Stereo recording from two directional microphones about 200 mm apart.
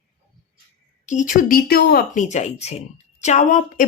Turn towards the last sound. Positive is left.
turn(degrees=35)  # may be behind; listen again after turning